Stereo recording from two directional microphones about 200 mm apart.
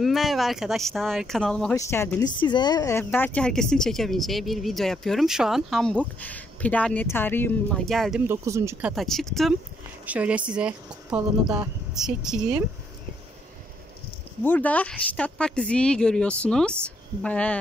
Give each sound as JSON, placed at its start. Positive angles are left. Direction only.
{"t": 0.0, "sound": "speech", "side_deg": 0}
{"t": 8.9, "sound": "speech", "side_deg": 0}
{"t": 11.4, "sound": "speech", "side_deg": -20}
{"t": 11.9, "sound": "speech", "side_deg": 0}
{"t": 14.4, "sound": "speech", "side_deg": 10}